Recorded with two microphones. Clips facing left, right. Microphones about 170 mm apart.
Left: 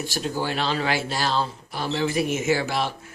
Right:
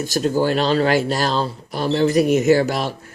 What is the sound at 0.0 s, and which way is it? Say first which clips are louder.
Speech: right 8 dB; 45° right (ahead or behind).